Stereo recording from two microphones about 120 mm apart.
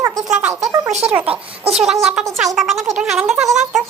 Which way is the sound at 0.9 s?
65° right (ahead or behind).